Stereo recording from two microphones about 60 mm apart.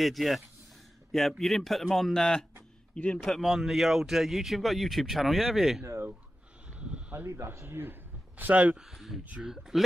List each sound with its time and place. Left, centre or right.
0.0 s speech: centre
1.4 s speech: centre
3.3 s speech: centre
6.7 s sheep: centre
7.2 s a man's voice: right
8.8 s speech: centre